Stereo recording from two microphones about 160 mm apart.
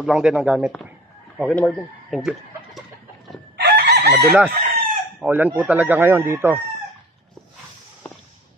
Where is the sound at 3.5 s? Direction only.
90° right.